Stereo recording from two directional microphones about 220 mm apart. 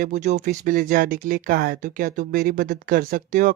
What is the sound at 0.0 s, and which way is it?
Speech, 35° right (ahead or behind).